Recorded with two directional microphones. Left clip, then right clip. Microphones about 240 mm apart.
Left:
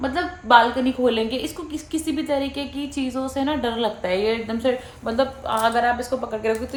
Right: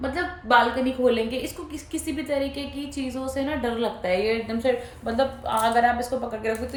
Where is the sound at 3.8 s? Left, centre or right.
Centre.